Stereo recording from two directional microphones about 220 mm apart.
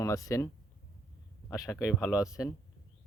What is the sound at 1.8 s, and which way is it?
Speech, centre (ahead or behind).